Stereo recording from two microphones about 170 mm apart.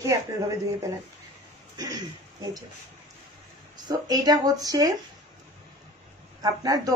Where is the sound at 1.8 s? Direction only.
25° right (ahead or behind).